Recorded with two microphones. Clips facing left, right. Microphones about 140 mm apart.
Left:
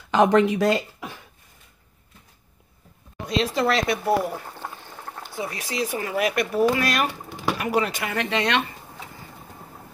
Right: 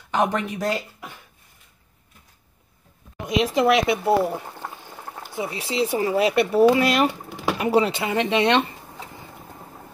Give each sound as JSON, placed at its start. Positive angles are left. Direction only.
{"t": 0.1, "sound": "speech", "side_deg": 90}
{"t": 3.5, "sound": "speech", "side_deg": -15}
{"t": 4.5, "sound": "boiling", "side_deg": -10}
{"t": 5.3, "sound": "speech", "side_deg": -25}
{"t": 7.2, "sound": "a sound", "side_deg": 0}
{"t": 7.5, "sound": "speech", "side_deg": -25}